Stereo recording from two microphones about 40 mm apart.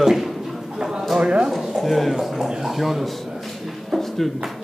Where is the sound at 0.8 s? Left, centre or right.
Centre.